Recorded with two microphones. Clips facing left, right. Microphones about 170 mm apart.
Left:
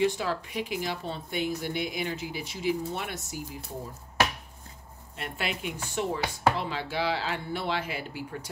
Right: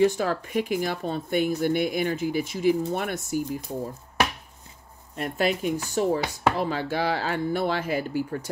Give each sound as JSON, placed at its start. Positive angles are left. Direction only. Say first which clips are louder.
{"t": 0.0, "sound": "speech", "louder": "right 5 dB", "side_deg": -45}
{"t": 5.1, "sound": "speech", "louder": "right 9 dB", "side_deg": -45}